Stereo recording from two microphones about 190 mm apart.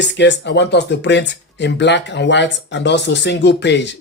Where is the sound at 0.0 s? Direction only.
65° left (ahead or behind).